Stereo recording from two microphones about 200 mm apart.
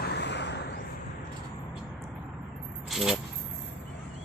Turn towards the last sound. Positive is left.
turn(degrees=0)  # may be behind; listen again after turning